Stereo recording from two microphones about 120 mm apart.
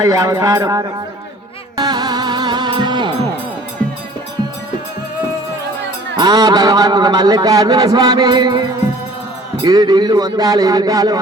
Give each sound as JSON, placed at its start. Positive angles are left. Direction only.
{"t": 0.0, "sound": "speech", "side_deg": -30}
{"t": 1.7, "sound": "music", "side_deg": -35}
{"t": 6.1, "sound": "a man's voice", "side_deg": -35}